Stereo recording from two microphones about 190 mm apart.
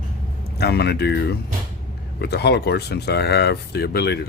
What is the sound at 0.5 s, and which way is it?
Speech, 60° left (ahead or behind).